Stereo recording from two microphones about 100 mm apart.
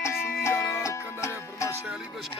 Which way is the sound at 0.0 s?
25° left (ahead or behind).